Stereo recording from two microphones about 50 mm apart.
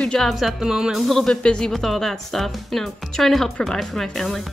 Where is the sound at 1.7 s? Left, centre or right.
Centre.